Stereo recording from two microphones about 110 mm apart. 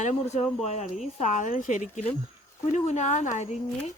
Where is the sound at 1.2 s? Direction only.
90° left.